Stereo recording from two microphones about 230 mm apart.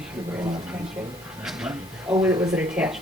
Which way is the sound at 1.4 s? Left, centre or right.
Centre.